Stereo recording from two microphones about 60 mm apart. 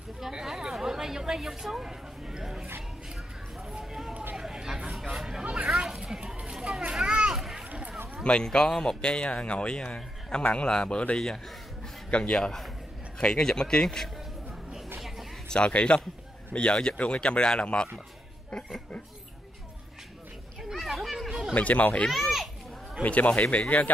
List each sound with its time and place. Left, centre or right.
0.2 s speech: centre
3.7 s a sound: centre
4.9 s hubbub: centre
5.4 s a sound: centre
6.8 s children playing: centre
7.2 s a sound: centre
8.2 s speech: centre
15.0 s a sound: centre
15.4 s a man's voice: centre
20.7 s children playing: centre
21.5 s speech: left
22.1 s a child's voice: centre
23.0 s speech: left